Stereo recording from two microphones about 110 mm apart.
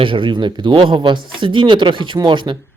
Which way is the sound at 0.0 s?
50° right (ahead or behind).